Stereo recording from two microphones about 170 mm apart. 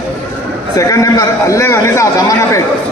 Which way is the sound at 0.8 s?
20° left (ahead or behind).